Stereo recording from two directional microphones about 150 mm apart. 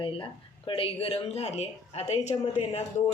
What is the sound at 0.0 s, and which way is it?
Speech, 35° left (ahead or behind).